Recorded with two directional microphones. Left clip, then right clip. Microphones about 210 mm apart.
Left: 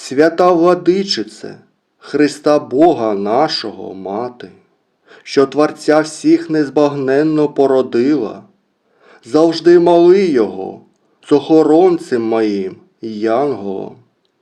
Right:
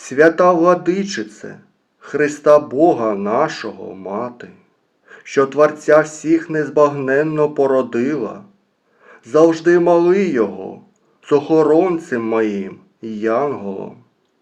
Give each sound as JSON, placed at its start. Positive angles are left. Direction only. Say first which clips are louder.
{"t": 0.0, "sound": "speech", "louder": "even", "side_deg": 40}